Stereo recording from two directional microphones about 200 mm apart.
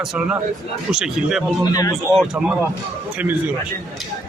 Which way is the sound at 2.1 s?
Centre (ahead or behind).